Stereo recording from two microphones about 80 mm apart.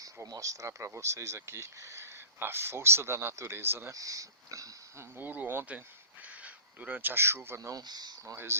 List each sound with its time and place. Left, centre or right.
0.0 s speech: right
3.9 s speech: right
5.1 s speech: right
7.7 s speech: right
8.2 s speech: right